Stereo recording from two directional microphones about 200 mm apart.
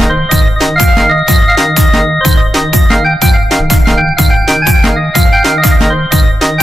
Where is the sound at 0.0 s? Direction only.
Centre (ahead or behind).